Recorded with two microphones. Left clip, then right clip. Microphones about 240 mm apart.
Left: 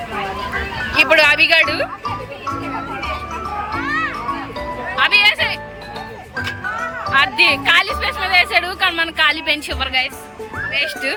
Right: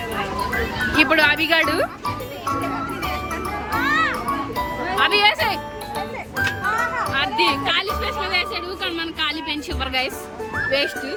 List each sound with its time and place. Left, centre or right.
0.9 s speech: centre
3.8 s children playing: centre
4.9 s speech: centre
7.1 s speech: centre